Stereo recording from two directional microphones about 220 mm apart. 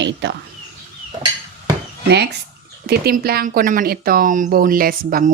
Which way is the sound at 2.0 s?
50° right (ahead or behind).